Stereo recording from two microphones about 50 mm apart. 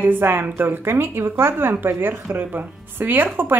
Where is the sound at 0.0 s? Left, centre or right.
Right.